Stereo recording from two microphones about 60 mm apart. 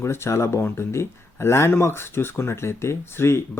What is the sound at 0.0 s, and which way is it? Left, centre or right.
Speech, left.